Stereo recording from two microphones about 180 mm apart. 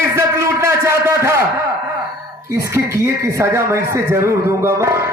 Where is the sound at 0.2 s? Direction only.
15° right (ahead or behind).